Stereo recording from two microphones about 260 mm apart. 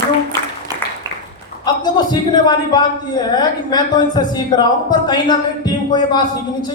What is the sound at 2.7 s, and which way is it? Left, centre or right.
A man's voice, centre.